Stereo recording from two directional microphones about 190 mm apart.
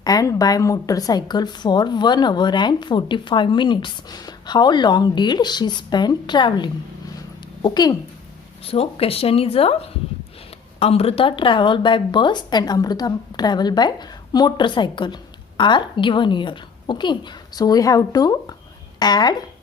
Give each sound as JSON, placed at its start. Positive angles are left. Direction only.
{"t": 0.0, "sound": "a woman's voice", "side_deg": 20}